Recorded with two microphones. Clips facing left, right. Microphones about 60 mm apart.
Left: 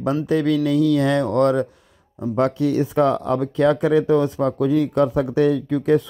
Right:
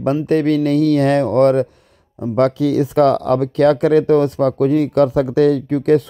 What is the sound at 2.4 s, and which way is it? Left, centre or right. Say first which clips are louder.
Speech: right 4 dB; right.